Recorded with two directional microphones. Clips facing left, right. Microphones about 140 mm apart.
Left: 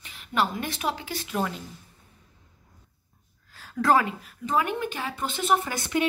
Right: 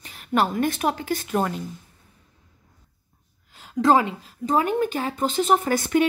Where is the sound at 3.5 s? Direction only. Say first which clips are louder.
Right 4 dB; 20° right (ahead or behind).